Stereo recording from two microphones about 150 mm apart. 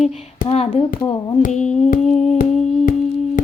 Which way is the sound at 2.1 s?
45° left (ahead or behind).